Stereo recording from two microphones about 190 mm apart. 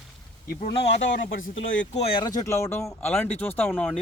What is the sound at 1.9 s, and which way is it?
Speech, 30° left (ahead or behind).